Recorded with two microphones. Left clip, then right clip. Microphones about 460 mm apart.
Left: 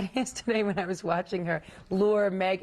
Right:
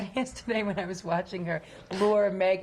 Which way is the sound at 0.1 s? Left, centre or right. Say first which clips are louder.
Left 1 dB; left.